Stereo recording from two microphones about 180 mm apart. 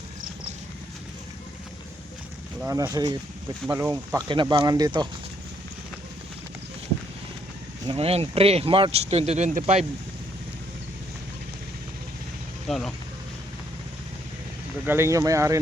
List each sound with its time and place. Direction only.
2.6 s speech: 20° right (ahead or behind)
4.3 s speech: 25° right (ahead or behind)
7.9 s speech: 35° right (ahead or behind)
12.6 s speech: centre (ahead or behind)
14.8 s speech: 15° right (ahead or behind)